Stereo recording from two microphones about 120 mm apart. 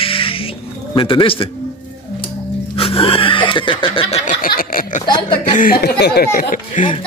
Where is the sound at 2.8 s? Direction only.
50° left (ahead or behind).